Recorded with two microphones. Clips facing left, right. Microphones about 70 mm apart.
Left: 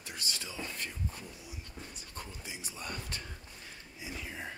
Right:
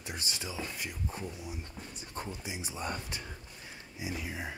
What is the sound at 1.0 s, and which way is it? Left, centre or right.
Speech, right.